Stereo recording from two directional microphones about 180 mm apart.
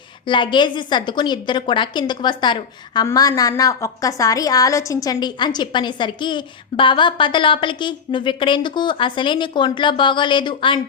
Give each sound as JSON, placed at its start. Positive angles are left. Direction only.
{"t": 0.3, "sound": "a woman's voice", "side_deg": 25}